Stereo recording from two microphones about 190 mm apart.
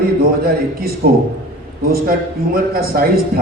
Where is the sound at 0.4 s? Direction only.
50° right (ahead or behind).